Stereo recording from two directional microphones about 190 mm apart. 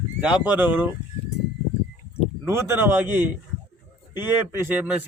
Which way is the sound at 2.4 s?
15° right (ahead or behind).